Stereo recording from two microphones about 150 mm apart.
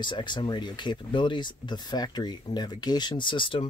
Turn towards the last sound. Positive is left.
turn(degrees=35)  # may be behind; listen again after turning